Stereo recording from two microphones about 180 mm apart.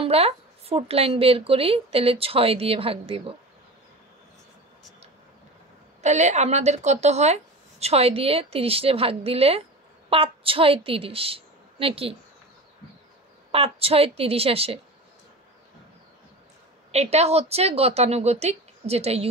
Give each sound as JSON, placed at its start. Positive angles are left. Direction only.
{"t": 0.0, "sound": "speech", "side_deg": -35}
{"t": 6.0, "sound": "a woman's voice", "side_deg": -40}
{"t": 13.5, "sound": "speech", "side_deg": -30}
{"t": 16.9, "sound": "speech", "side_deg": -35}